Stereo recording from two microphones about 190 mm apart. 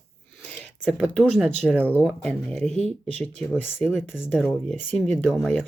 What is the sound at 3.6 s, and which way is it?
Speech, 10° left (ahead or behind).